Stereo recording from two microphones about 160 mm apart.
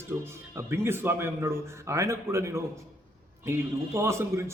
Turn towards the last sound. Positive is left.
turn(degrees=-15)  # may be behind; listen again after turning